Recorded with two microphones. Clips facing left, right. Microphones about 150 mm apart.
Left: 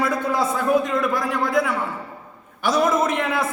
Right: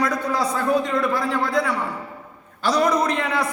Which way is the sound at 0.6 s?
20° left (ahead or behind).